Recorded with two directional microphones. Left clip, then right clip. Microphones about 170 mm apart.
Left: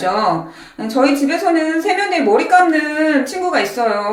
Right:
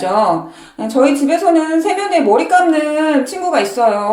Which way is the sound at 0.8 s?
25° right (ahead or behind).